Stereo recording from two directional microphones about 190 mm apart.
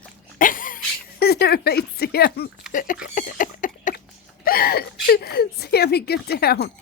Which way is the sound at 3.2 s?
45° left (ahead or behind).